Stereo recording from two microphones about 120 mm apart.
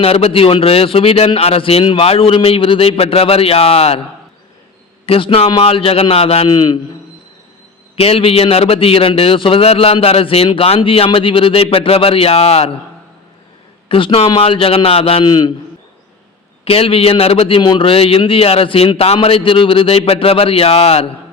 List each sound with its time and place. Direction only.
0.0 s a man's voice: 50° left (ahead or behind)
5.0 s a man's voice: 50° left (ahead or behind)
6.5 s a man's voice: 35° left (ahead or behind)
7.9 s a man's voice: 55° left (ahead or behind)
13.8 s a man's voice: 50° left (ahead or behind)
15.2 s a man's voice: 40° left (ahead or behind)
16.6 s a man's voice: 55° left (ahead or behind)